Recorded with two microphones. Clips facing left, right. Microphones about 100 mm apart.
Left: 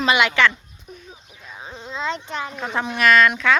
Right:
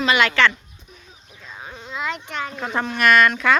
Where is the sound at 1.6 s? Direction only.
25° left (ahead or behind).